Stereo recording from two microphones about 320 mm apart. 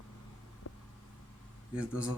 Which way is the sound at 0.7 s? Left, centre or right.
Left.